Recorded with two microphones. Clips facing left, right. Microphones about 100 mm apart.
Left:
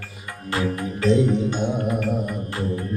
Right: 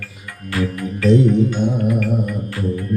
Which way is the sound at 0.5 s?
25° left (ahead or behind).